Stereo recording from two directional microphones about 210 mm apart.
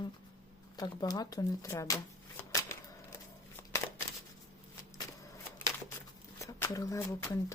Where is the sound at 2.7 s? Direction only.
10° left (ahead or behind).